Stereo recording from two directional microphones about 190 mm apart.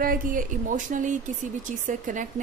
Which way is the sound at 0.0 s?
45° right (ahead or behind).